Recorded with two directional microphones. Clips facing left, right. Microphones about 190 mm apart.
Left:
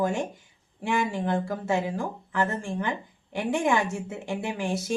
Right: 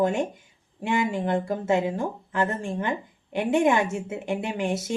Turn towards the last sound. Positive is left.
turn(degrees=-20)  # may be behind; listen again after turning